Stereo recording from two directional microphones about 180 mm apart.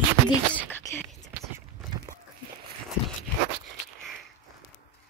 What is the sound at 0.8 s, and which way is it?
Whispering, 15° left (ahead or behind).